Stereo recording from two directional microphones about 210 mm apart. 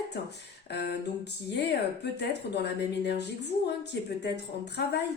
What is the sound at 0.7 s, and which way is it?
Speech, 55° left (ahead or behind).